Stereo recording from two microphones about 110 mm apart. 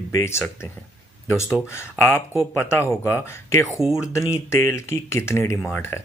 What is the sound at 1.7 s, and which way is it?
Speech, 20° left (ahead or behind).